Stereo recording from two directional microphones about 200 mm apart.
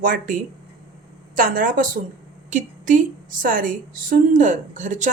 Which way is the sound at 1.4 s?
45° right (ahead or behind).